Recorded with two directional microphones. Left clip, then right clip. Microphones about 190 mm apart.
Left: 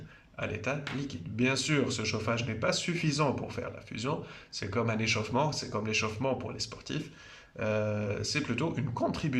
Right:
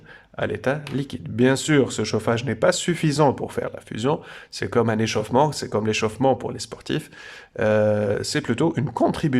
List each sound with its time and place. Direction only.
0.3 s speech: 45° right (ahead or behind)